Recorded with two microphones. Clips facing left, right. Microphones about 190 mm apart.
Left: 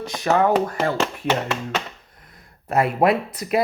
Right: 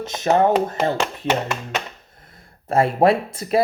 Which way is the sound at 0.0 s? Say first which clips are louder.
Right 2 dB; 20° right (ahead or behind).